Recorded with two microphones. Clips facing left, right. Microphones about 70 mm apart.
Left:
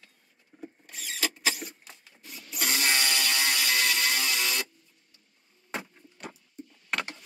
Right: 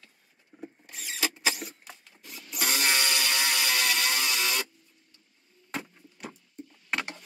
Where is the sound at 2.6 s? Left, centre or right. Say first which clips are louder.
Even; right.